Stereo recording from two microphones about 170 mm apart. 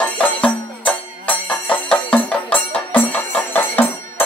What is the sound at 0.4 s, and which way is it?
Music, 10° left (ahead or behind).